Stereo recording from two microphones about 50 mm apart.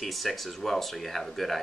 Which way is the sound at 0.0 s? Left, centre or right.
Centre.